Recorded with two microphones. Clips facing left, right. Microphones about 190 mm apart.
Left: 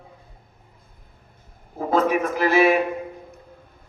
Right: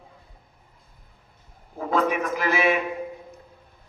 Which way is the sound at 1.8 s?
35° left (ahead or behind).